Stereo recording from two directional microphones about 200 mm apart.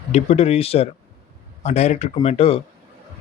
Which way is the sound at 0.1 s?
30° left (ahead or behind).